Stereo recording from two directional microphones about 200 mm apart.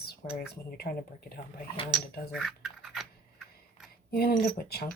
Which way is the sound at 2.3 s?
Centre (ahead or behind).